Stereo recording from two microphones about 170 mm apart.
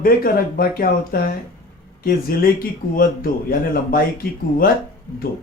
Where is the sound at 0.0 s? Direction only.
60° left (ahead or behind).